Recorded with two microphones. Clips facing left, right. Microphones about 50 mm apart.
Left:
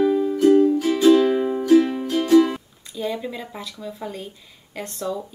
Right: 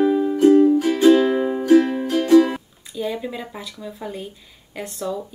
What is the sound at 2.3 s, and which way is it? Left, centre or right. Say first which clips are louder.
Music: right 2 dB; centre.